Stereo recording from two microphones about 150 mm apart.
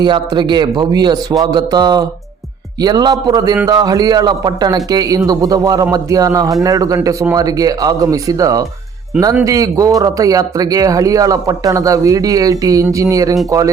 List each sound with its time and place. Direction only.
0.0 s a man's voice: 30° right (ahead or behind)